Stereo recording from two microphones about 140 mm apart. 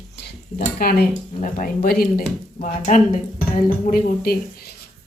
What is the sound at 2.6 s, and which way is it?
Speech, 70° left (ahead or behind).